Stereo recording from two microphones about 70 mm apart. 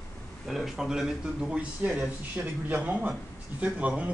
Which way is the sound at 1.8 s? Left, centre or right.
Centre.